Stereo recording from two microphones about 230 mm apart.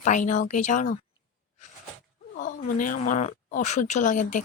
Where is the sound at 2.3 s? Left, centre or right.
Left.